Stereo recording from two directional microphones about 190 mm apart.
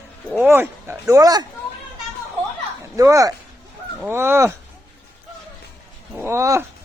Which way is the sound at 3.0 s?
15° right (ahead or behind).